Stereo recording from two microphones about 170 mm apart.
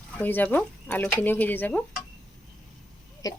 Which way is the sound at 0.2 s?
10° left (ahead or behind).